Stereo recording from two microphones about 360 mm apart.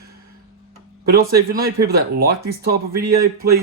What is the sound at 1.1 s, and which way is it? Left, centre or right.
Speech, right.